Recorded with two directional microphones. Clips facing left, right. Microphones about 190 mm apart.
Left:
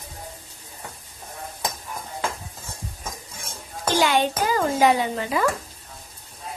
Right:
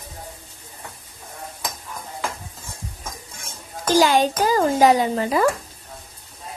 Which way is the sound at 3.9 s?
40° right (ahead or behind).